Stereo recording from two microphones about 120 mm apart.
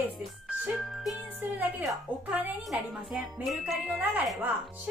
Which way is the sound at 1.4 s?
15° right (ahead or behind).